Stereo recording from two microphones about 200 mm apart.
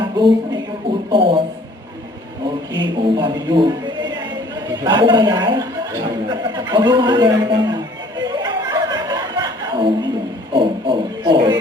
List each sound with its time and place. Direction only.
0.0 s a woman's voice: 20° right (ahead or behind)
1.1 s a sound: 25° right (ahead or behind)
2.7 s speech: 20° right (ahead or behind)
8.2 s chuckle: 20° right (ahead or behind)
10.5 s heart murmur: 25° right (ahead or behind)